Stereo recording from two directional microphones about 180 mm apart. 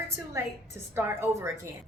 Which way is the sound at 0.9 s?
15° right (ahead or behind).